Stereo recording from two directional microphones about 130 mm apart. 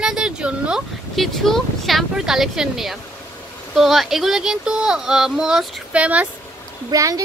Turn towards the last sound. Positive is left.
turn(degrees=-25)  # may be behind; listen again after turning